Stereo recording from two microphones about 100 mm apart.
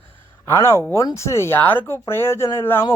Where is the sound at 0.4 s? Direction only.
30° left (ahead or behind).